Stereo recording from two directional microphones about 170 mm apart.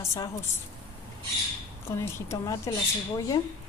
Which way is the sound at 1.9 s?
15° left (ahead or behind).